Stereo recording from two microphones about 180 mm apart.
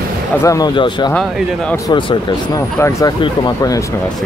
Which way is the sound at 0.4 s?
20° left (ahead or behind).